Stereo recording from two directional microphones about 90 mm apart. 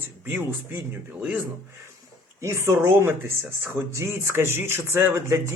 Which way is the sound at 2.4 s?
30° right (ahead or behind).